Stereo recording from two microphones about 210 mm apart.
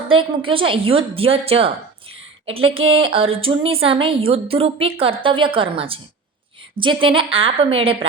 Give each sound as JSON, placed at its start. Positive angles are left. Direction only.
{"t": 0.1, "sound": "a woman's voice", "side_deg": -25}